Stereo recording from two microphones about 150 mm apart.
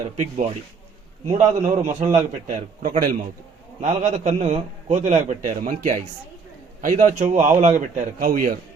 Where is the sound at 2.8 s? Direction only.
65° right (ahead or behind).